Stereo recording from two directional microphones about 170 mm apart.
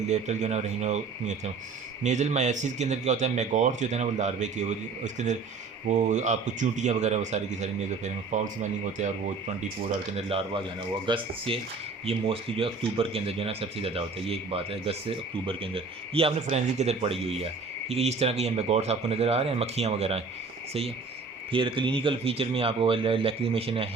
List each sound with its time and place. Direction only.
0.1 s speech: 40° right (ahead or behind)
10.2 s speech: 35° right (ahead or behind)
21.5 s speech: 30° right (ahead or behind)